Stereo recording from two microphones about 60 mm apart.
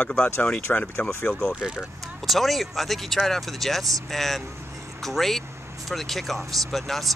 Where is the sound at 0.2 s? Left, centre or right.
Left.